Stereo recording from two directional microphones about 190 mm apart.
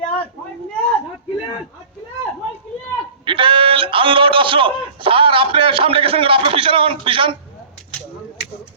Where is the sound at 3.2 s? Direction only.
25° right (ahead or behind).